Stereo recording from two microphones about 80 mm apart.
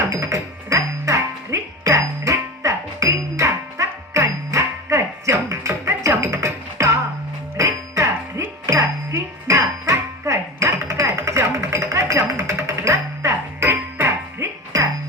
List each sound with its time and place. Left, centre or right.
0.0 s music: right
14.7 s music: right